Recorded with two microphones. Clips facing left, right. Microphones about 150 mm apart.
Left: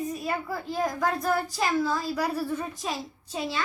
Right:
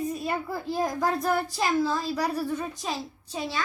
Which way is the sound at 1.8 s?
5° left (ahead or behind).